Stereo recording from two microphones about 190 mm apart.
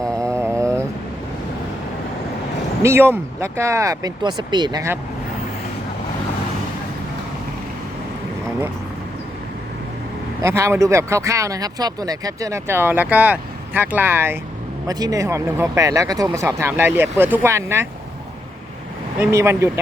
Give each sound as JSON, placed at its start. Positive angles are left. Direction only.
{"t": 0.2, "sound": "mantra", "side_deg": -15}
{"t": 2.8, "sound": "speech", "side_deg": -15}
{"t": 10.4, "sound": "speech", "side_deg": -15}
{"t": 19.2, "sound": "speech", "side_deg": -15}